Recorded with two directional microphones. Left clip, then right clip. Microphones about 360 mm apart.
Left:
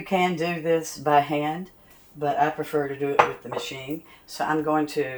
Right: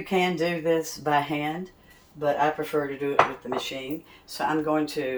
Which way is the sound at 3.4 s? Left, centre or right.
Centre.